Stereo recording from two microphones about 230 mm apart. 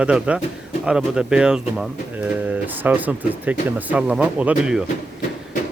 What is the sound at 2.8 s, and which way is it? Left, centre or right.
Speech, centre.